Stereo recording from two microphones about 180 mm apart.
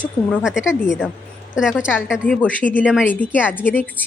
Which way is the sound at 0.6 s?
15° left (ahead or behind).